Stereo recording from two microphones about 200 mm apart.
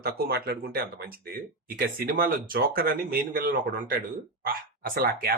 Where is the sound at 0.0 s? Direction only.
50° right (ahead or behind).